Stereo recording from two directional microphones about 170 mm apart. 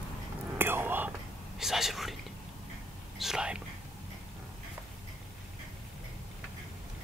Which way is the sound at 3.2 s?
5° right (ahead or behind).